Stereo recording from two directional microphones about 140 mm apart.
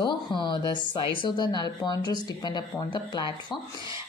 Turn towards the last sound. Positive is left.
turn(degrees=35)  # may be behind; listen again after turning